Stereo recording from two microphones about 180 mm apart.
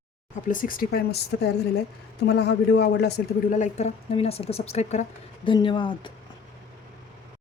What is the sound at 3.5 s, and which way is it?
Speech, 40° left (ahead or behind).